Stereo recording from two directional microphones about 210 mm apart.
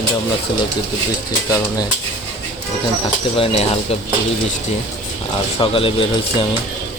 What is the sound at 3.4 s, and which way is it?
Speech, 30° left (ahead or behind).